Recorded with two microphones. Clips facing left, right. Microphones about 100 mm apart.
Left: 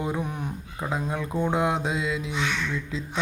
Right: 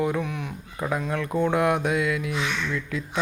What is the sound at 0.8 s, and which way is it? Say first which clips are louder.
Speech: right 2 dB; 20° left (ahead or behind).